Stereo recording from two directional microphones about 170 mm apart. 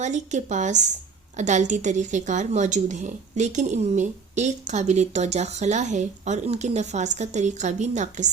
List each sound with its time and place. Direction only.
0.0 s a woman's voice: 45° right (ahead or behind)